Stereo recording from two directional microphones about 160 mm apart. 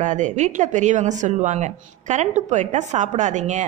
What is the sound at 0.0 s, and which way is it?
A woman's voice, 50° right (ahead or behind).